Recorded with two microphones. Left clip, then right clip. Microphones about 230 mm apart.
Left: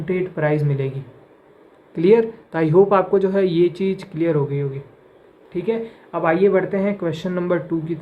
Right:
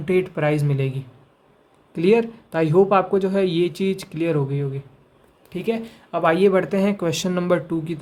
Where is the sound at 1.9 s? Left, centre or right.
Right.